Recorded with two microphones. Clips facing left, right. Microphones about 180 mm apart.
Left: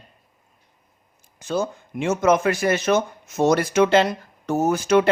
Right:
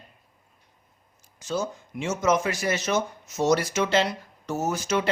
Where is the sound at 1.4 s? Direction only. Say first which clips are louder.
Left 4 dB; 60° left (ahead or behind).